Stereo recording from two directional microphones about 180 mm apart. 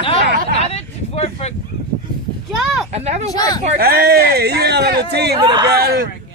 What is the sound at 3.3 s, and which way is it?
Speech, 20° left (ahead or behind).